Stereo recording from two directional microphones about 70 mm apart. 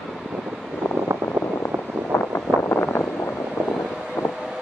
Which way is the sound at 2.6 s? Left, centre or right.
Left.